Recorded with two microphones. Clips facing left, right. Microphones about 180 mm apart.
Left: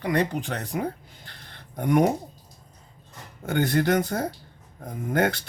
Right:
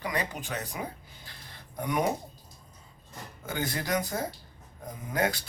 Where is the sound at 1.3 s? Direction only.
60° left (ahead or behind).